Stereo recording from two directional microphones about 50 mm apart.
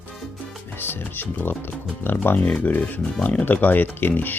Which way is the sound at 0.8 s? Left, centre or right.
Left.